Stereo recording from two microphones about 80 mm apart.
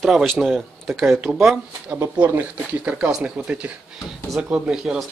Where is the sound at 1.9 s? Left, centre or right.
Centre.